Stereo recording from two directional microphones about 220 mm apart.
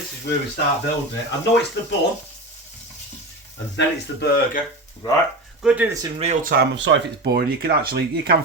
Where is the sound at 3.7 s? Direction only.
45° left (ahead or behind).